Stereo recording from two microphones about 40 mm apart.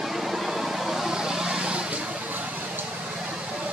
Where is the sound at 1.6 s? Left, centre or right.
Right.